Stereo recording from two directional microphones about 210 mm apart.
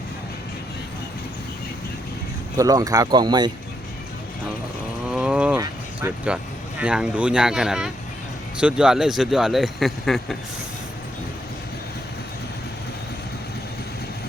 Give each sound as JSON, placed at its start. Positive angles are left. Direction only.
{"t": 2.6, "sound": "speech", "side_deg": -15}
{"t": 5.0, "sound": "a sound", "side_deg": -5}
{"t": 5.5, "sound": "speech", "side_deg": -10}